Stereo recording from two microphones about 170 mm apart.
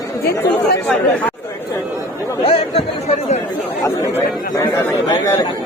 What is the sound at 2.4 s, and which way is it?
Speech, 35° left (ahead or behind).